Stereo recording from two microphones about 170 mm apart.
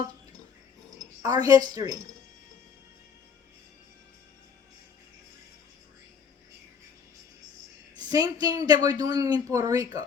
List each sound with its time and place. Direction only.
0.9 s a sound: 20° right (ahead or behind)
1.7 s speech: 20° right (ahead or behind)
7.9 s speech: 25° right (ahead or behind)